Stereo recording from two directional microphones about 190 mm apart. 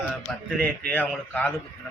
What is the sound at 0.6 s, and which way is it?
Speech, 10° left (ahead or behind).